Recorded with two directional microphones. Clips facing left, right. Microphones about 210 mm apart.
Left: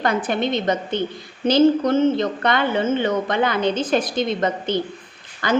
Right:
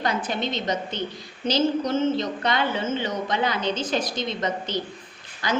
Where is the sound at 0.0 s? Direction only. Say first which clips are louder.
Left 5 dB; 55° left (ahead or behind).